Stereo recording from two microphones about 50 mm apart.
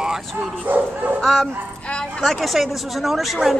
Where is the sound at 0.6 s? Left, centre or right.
Right.